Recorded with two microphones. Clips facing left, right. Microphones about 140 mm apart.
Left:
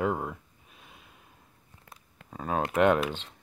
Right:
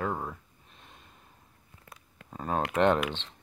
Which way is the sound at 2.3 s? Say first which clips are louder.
Even; centre (ahead or behind).